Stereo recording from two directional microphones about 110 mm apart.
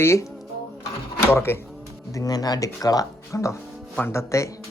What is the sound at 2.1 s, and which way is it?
Speech, 35° left (ahead or behind).